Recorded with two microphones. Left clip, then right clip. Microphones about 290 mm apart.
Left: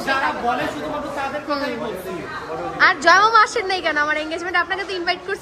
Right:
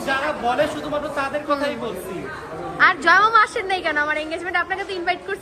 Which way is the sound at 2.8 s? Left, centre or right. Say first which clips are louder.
Left 1 dB; centre.